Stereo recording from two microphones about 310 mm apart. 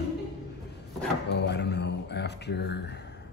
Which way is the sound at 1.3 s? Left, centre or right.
Left.